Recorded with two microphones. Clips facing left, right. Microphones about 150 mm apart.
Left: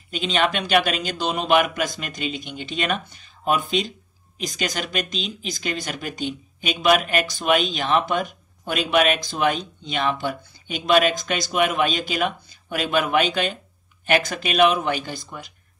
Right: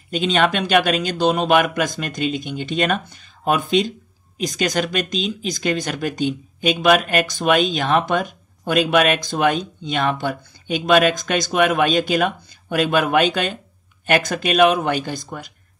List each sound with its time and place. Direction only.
0.1 s speech: 40° right (ahead or behind)